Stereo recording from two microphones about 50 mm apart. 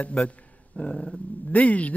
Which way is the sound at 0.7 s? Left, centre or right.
Centre.